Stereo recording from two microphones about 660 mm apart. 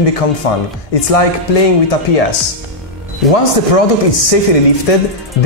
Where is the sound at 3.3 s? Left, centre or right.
Left.